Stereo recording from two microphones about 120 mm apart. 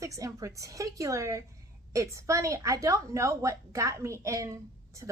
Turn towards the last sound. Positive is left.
turn(degrees=-25)  # may be behind; listen again after turning